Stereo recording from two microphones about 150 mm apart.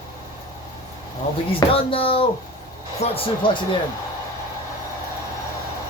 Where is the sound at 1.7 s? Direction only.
40° left (ahead or behind).